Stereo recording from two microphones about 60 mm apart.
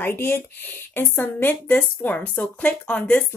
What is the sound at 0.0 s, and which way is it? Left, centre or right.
Speech, left.